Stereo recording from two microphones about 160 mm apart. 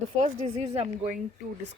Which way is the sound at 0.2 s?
40° right (ahead or behind).